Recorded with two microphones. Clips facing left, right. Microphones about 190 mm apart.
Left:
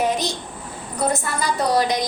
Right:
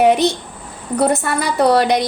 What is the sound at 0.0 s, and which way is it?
A woman's voice, 65° right (ahead or behind).